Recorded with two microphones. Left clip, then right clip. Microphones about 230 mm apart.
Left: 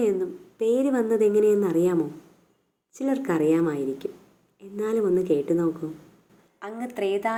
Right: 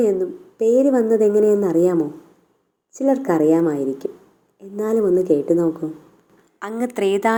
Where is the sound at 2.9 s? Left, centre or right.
Centre.